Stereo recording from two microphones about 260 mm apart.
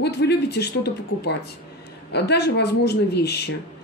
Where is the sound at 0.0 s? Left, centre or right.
Left.